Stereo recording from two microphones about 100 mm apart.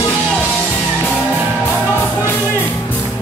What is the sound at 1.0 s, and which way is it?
Music, 15° left (ahead or behind).